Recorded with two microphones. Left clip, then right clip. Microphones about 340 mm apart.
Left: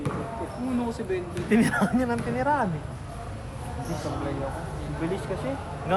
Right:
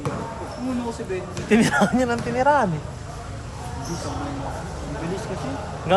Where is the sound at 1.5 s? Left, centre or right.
Right.